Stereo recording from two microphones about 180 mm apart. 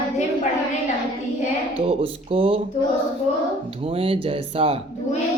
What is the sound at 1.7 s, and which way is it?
Speech, 30° right (ahead or behind).